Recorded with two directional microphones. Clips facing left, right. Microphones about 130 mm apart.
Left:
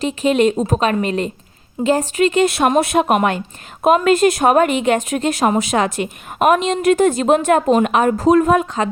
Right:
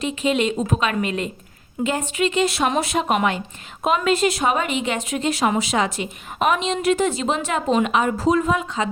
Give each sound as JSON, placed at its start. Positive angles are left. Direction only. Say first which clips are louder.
{"t": 0.0, "sound": "a woman's voice", "louder": "left 6 dB", "side_deg": 45}